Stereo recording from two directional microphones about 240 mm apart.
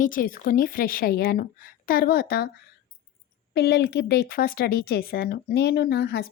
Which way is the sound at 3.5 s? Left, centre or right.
Left.